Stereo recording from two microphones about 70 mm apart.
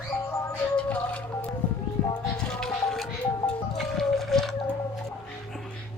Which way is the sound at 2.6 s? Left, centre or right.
Centre.